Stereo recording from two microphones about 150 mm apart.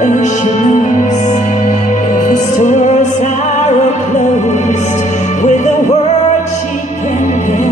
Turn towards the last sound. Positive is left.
turn(degrees=55)  # may be behind; listen again after turning